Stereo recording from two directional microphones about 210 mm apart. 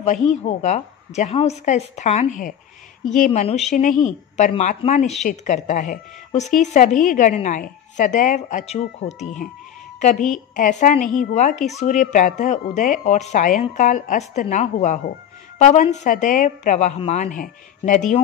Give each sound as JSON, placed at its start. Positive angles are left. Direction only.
{"t": 0.3, "sound": "a woman's voice", "side_deg": 35}